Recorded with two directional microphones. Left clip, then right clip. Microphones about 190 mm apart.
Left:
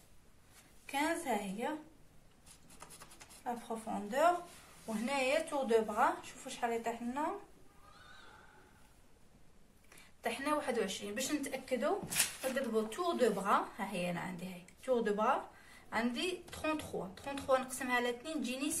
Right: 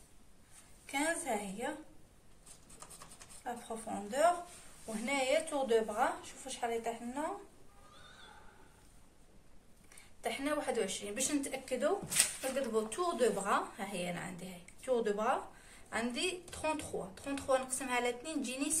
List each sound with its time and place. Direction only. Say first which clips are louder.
0.8 s a sound: even; centre (ahead or behind)
3.4 s a woman's voice: left 1 dB; 5° right (ahead or behind)
10.2 s a woman's voice: even; 10° right (ahead or behind)